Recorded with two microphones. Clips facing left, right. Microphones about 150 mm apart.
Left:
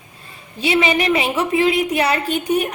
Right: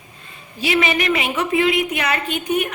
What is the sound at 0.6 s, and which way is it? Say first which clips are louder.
A woman's voice: left 2 dB; 30° left (ahead or behind).